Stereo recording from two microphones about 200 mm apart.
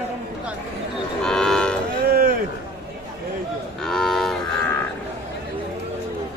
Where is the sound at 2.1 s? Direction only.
45° right (ahead or behind).